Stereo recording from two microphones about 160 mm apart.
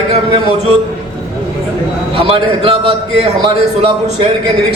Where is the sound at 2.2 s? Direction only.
35° right (ahead or behind).